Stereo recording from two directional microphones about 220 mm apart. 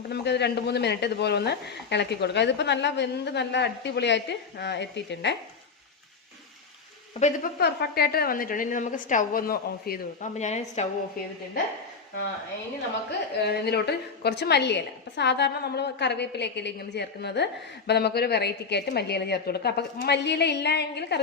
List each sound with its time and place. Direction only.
0.1 s a woman's voice: 50° left (ahead or behind)
7.2 s a woman's voice: 35° left (ahead or behind)
13.1 s a woman's voice: 45° left (ahead or behind)